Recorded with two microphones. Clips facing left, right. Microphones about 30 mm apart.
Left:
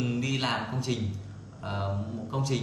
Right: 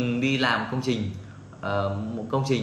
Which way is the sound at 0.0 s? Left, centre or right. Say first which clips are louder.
Right 6 dB; right.